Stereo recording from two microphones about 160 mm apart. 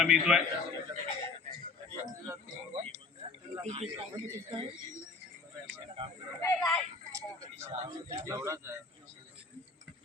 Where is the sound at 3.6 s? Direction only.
45° right (ahead or behind).